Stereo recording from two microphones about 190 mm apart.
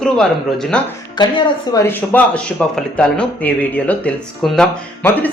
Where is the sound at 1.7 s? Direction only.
15° left (ahead or behind).